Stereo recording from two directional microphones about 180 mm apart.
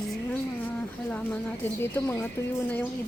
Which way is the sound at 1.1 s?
10° left (ahead or behind).